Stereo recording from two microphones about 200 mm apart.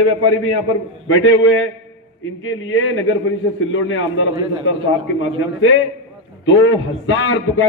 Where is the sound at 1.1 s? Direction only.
85° left.